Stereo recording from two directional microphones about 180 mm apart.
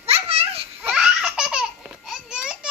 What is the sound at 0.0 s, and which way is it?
Baby laughter, 35° right (ahead or behind).